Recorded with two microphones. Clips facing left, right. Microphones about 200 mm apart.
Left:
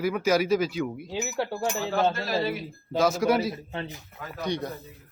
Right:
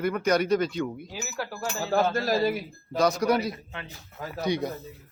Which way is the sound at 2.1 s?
40° right (ahead or behind).